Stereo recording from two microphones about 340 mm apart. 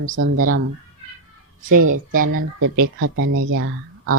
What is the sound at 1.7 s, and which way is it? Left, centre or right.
Speech, right.